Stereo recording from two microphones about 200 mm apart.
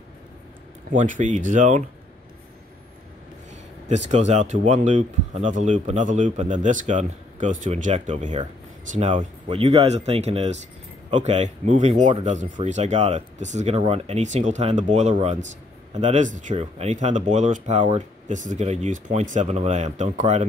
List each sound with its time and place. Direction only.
0.9 s speech: 40° right (ahead or behind)
3.9 s speech: 35° right (ahead or behind)